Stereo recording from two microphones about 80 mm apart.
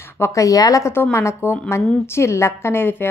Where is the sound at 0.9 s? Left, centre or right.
Left.